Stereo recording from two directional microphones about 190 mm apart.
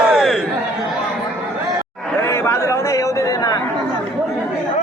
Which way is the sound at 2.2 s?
15° left (ahead or behind).